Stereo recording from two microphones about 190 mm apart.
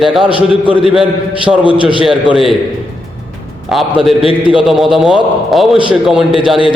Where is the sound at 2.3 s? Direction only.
Centre (ahead or behind).